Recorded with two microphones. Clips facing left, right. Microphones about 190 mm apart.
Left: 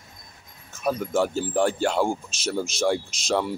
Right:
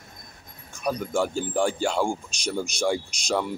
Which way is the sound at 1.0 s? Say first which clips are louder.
Left 2 dB; 5° left (ahead or behind).